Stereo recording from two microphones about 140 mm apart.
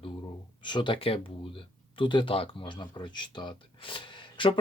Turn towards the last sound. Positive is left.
turn(degrees=35)  # may be behind; listen again after turning